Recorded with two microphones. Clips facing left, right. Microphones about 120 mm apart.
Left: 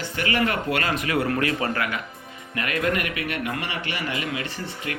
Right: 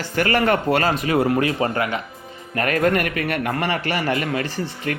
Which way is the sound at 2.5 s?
45° right (ahead or behind).